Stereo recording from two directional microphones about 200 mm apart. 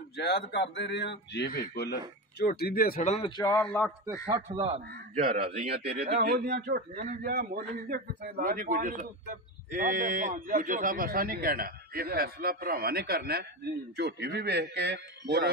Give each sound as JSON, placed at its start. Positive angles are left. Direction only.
{"t": 0.2, "sound": "a man's voice", "side_deg": 55}
{"t": 3.3, "sound": "a man's voice", "side_deg": 20}
{"t": 3.6, "sound": "speech", "side_deg": 5}
{"t": 4.3, "sound": "a man's voice", "side_deg": -25}
{"t": 5.9, "sound": "a man's voice", "side_deg": -50}